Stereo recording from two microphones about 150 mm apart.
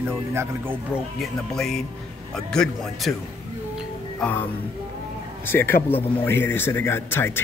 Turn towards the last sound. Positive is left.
turn(degrees=15)  # may be behind; listen again after turning